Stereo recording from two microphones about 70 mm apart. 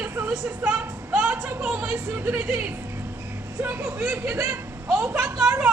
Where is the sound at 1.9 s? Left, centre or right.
Right.